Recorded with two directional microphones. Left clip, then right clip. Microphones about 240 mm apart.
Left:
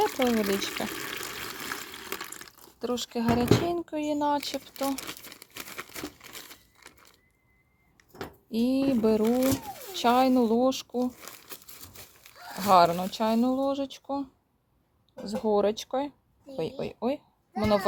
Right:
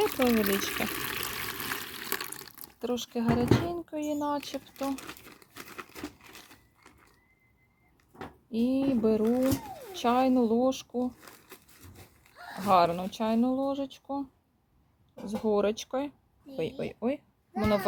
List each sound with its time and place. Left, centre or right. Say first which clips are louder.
0.0 s speech: left 1 dB; centre
1.7 s water: right 1 dB; centre
2.8 s speech: left 2 dB; centre
8.4 s speech: left 2 dB; centre
12.6 s speech: left 3 dB; centre